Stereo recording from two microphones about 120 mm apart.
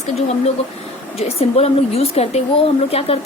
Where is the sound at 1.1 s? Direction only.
60° left (ahead or behind).